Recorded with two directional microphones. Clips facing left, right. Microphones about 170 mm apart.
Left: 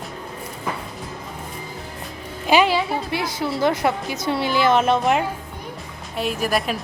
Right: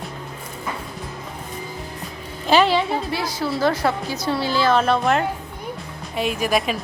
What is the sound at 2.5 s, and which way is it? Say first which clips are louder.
A woman's voice: right 1 dB; 10° left (ahead or behind).